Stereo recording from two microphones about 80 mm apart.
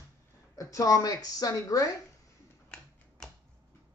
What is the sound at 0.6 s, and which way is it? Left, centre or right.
A woman's voice, left.